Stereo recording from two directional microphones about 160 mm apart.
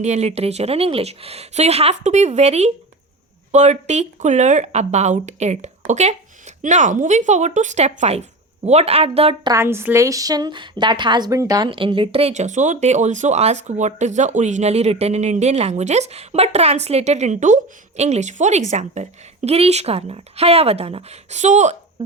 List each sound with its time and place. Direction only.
0.0 s a woman's voice: 45° right (ahead or behind)
9.5 s a woman's voice: 15° right (ahead or behind); by 21.8 s 45° right (ahead or behind)